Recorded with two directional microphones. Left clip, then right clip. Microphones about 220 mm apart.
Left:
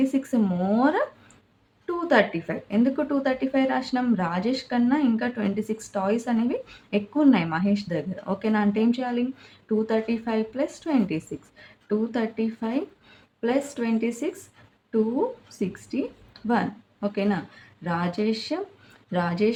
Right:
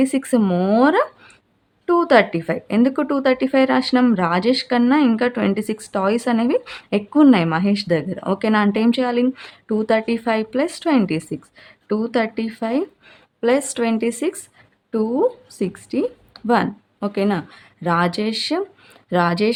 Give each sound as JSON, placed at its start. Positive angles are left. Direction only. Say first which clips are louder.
{"t": 0.0, "sound": "speech", "louder": "right 6 dB", "side_deg": -45}
{"t": 15.5, "sound": "speech", "louder": "right 7 dB", "side_deg": -45}